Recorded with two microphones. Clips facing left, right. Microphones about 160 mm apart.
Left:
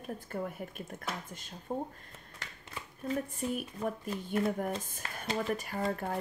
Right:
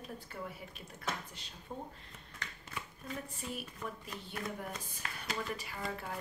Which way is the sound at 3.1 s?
50° left (ahead or behind).